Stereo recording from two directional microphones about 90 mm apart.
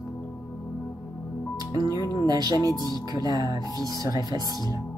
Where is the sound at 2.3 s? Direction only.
45° right (ahead or behind).